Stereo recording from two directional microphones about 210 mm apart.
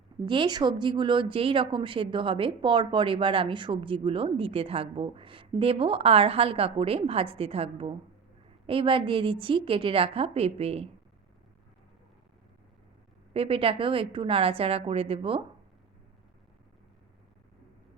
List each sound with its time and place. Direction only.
0.3 s a woman's voice: 20° right (ahead or behind)
13.3 s a woman's voice: 25° right (ahead or behind)